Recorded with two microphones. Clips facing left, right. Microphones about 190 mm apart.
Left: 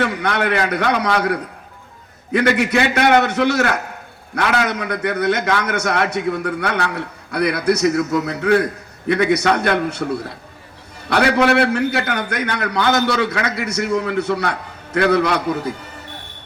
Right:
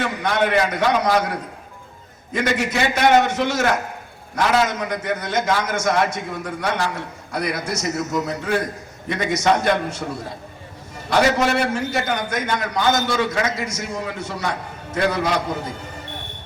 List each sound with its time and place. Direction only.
0.0 s a man's voice: 65° left (ahead or behind)